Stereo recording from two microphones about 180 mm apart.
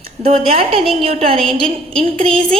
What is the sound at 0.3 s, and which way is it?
A woman's voice, 35° right (ahead or behind).